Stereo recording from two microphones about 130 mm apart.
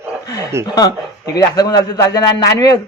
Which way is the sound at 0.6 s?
30° left (ahead or behind).